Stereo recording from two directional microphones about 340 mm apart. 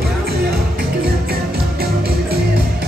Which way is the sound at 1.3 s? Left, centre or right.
Right.